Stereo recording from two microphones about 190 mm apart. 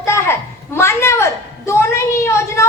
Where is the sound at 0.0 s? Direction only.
15° left (ahead or behind).